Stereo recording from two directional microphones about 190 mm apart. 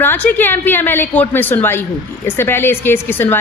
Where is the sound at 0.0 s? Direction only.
10° left (ahead or behind).